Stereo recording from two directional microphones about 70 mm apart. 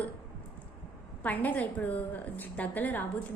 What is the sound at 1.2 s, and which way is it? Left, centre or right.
A woman's voice, left.